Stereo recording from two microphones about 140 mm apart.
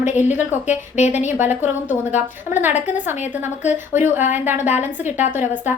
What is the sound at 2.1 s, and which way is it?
Speech, 55° left (ahead or behind).